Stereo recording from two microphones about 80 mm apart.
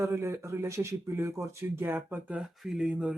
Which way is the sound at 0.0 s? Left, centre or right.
Right.